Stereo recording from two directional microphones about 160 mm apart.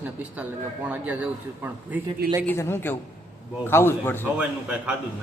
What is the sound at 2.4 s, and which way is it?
Speech, 15° left (ahead or behind).